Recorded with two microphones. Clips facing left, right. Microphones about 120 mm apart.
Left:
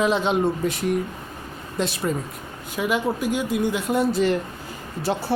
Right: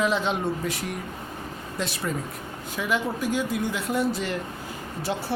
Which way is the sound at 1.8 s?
25° left (ahead or behind).